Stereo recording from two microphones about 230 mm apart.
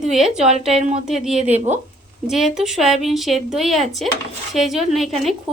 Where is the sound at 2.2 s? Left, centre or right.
Centre.